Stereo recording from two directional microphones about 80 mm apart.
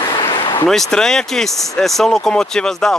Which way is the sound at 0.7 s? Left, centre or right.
Centre.